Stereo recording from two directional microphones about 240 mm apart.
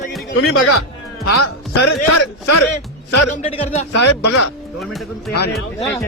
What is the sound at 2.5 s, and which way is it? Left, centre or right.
Speech, left.